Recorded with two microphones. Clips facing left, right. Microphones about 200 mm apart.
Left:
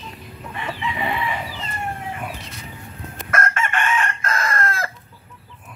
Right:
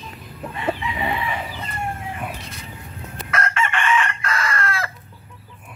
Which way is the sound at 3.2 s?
50° left (ahead or behind).